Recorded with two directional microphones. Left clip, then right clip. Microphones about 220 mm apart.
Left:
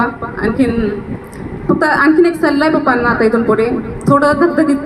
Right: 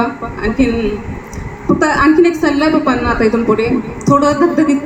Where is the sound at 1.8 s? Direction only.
45° right (ahead or behind).